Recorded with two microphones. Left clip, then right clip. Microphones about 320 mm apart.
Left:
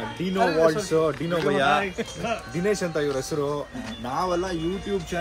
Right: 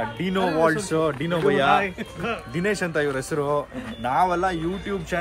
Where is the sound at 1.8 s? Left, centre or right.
Centre.